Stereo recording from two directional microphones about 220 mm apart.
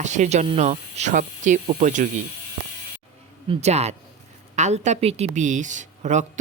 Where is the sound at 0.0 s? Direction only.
35° right (ahead or behind).